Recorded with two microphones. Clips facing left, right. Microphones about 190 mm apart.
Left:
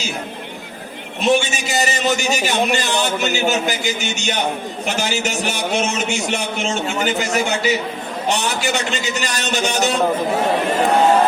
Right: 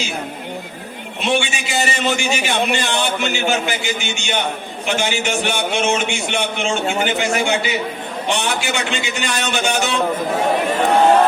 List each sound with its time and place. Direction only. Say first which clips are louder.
1.2 s a man's voice: left 3 dB; 40° left (ahead or behind)